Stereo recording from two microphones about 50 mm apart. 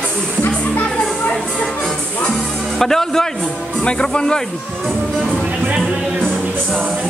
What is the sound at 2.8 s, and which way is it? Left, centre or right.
Music, centre.